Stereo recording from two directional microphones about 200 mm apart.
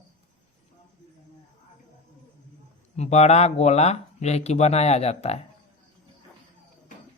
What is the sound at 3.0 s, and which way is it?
Speech, 35° left (ahead or behind).